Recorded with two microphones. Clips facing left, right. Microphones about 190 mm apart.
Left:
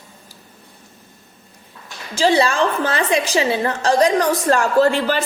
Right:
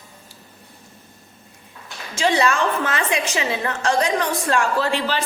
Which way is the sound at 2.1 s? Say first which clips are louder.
Left 3 dB; 35° left (ahead or behind).